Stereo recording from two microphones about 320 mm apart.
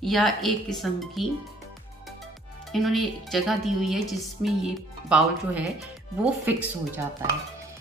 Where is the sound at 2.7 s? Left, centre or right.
Centre.